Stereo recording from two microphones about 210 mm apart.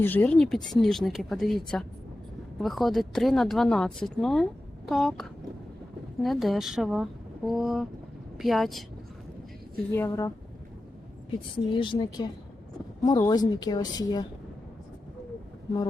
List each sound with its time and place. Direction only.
0.0 s a woman's voice: 10° left (ahead or behind)
6.2 s a woman's voice: centre (ahead or behind)
9.9 s a woman's voice: 10° left (ahead or behind)
11.5 s a woman's voice: 25° left (ahead or behind)